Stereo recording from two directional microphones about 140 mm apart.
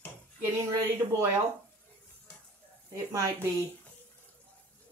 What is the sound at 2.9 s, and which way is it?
Speech, 20° right (ahead or behind).